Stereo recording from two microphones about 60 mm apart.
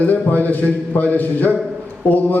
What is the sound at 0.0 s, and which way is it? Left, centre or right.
A man's voice, left.